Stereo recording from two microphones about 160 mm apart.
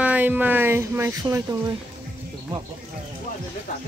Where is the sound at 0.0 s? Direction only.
10° right (ahead or behind).